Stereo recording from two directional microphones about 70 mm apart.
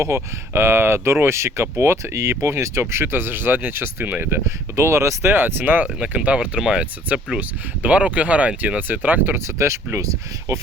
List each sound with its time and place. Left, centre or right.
0.0 s speech: right
4.4 s speech: right
6.0 s speech: centre; by 10.1 s right